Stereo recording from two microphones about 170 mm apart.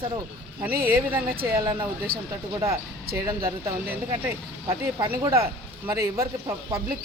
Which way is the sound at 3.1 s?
65° right (ahead or behind).